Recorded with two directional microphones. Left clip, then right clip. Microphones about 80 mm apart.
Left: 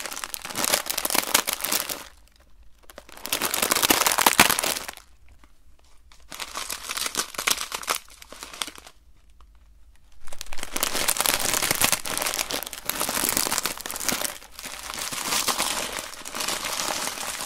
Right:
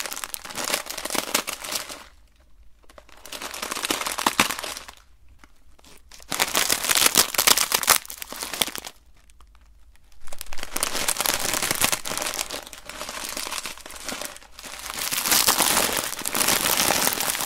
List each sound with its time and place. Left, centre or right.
0.0 s crumpling: centre
0.5 s crumpling: centre; by 3.2 s left
3.2 s a sound: left
6.1 s a sound: right
8.6 s crumpling: right
10.2 s crumpling: centre
12.4 s crumpling: left
12.8 s crumpling: left
14.1 s crumpling: left
14.8 s crumpling: centre
15.2 s crumpling: right